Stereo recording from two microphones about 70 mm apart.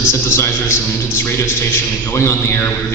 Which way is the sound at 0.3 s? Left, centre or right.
Left.